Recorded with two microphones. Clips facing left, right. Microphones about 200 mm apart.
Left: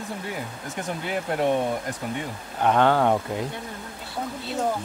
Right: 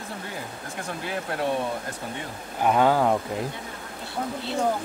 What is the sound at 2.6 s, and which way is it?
Speech, 5° right (ahead or behind).